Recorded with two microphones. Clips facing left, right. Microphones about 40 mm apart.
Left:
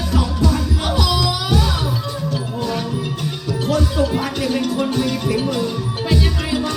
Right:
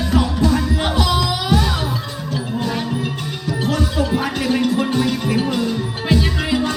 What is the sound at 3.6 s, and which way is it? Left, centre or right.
Music, right.